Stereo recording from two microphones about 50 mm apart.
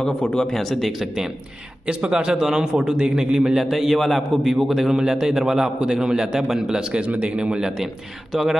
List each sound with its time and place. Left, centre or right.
0.3 s speech: centre
1.9 s a man's voice: right